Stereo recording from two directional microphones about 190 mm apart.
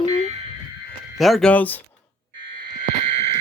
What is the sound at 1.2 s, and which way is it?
Speech, centre (ahead or behind).